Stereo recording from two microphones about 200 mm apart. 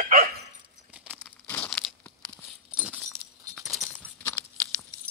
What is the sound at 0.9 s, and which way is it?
Crumpling, 5° right (ahead or behind).